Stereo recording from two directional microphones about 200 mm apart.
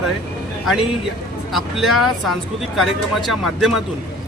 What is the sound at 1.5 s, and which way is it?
Speech, centre (ahead or behind).